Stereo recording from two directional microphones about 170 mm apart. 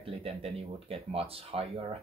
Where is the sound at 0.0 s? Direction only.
35° right (ahead or behind).